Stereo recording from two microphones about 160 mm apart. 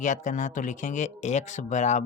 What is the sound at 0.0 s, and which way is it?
Speech, 50° left (ahead or behind).